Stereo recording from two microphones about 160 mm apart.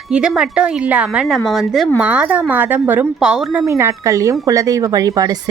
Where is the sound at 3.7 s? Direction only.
20° right (ahead or behind).